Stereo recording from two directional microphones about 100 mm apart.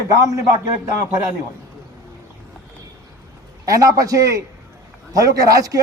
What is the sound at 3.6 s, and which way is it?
Speech, 35° right (ahead or behind).